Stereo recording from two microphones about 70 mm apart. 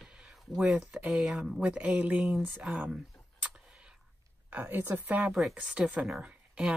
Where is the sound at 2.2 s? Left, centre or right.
Centre.